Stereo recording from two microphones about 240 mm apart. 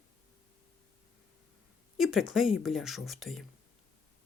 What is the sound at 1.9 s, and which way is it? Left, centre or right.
Speech, centre.